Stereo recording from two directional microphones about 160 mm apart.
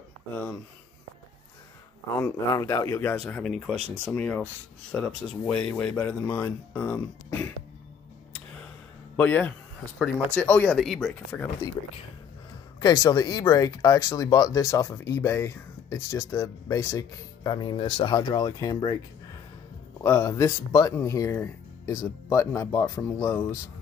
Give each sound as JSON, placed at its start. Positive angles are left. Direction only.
{"t": 0.3, "sound": "speech", "side_deg": 10}
{"t": 2.1, "sound": "speech", "side_deg": 15}
{"t": 9.1, "sound": "a man's voice", "side_deg": 10}
{"t": 12.8, "sound": "speech", "side_deg": 25}
{"t": 17.7, "sound": "speech", "side_deg": 35}
{"t": 18.1, "sound": "speech", "side_deg": 25}
{"t": 20.0, "sound": "speech", "side_deg": 20}